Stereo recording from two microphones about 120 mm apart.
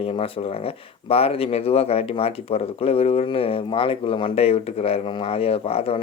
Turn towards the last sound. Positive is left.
turn(degrees=55)  # may be behind; listen again after turning